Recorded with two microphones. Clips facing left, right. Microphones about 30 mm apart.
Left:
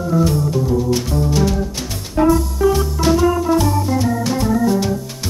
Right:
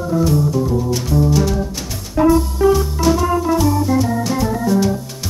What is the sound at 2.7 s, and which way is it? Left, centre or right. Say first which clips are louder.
Music: right 1 dB; centre.